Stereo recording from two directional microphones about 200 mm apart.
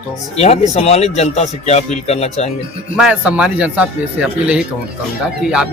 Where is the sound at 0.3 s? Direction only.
30° left (ahead or behind).